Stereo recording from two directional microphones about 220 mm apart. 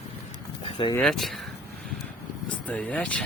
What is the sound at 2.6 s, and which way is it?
Speech, 5° left (ahead or behind).